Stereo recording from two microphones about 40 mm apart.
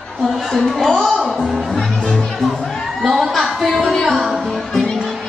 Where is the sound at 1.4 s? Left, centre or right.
Centre.